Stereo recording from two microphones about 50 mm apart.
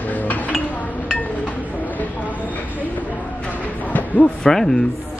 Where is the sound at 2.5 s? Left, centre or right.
Left.